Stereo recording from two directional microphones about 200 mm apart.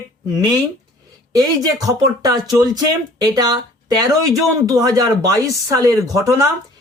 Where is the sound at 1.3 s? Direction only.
15° right (ahead or behind).